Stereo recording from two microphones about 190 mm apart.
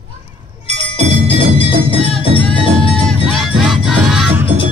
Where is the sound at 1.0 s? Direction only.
35° right (ahead or behind).